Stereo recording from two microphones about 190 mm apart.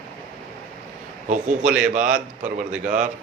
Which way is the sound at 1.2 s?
40° right (ahead or behind).